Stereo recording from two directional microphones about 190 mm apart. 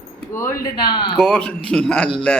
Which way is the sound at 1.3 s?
10° left (ahead or behind).